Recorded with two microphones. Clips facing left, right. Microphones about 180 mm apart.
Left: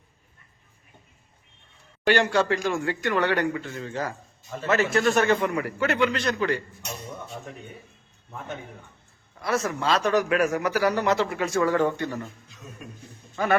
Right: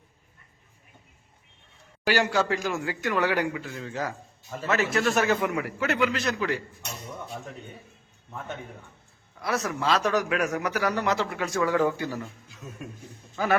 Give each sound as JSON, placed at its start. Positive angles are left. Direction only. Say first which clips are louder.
{"t": 2.0, "sound": "a man's voice", "louder": "left 3 dB", "side_deg": -5}
{"t": 9.4, "sound": "a man's voice", "louder": "left 2 dB", "side_deg": 0}
{"t": 13.3, "sound": "speech", "louder": "left 2 dB", "side_deg": 0}